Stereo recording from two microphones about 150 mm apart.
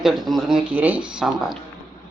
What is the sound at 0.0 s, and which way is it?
Speech, centre (ahead or behind).